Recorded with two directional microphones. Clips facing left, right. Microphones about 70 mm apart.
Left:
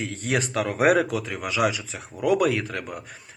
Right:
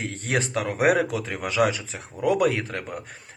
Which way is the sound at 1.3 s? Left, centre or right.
Right.